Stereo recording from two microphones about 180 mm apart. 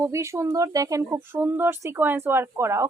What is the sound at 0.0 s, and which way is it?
Speech, 15° right (ahead or behind).